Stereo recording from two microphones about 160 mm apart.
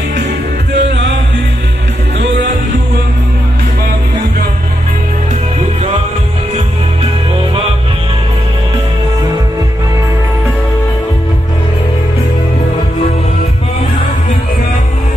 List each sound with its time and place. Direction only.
0.7 s music: 90° right